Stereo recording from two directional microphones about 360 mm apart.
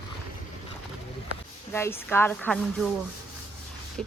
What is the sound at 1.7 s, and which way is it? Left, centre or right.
Speech, centre.